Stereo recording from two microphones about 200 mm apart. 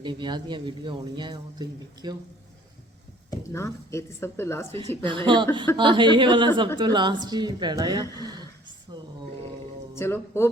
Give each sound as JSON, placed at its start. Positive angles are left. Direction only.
{"t": 0.0, "sound": "a man's voice", "side_deg": -25}
{"t": 3.2, "sound": "speech", "side_deg": 15}
{"t": 4.8, "sound": "a man's voice", "side_deg": -25}
{"t": 9.9, "sound": "speech", "side_deg": 15}